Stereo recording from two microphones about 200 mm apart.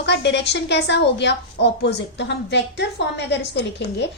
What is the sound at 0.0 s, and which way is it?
A woman's voice, 60° left (ahead or behind).